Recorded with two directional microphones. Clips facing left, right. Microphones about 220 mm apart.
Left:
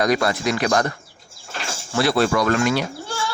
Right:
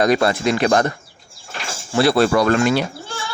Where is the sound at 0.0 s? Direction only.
25° right (ahead or behind).